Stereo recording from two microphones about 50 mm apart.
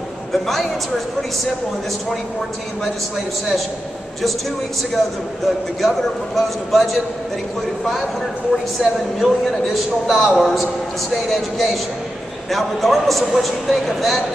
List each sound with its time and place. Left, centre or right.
0.3 s a man's voice: centre
5.8 s a man's voice: centre
8.8 s a man's voice: centre